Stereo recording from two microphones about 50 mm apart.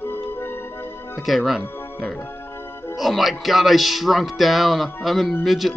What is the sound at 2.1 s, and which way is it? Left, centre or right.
Music, left.